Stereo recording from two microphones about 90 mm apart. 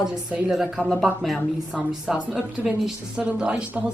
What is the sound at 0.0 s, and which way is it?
Speech, 10° right (ahead or behind).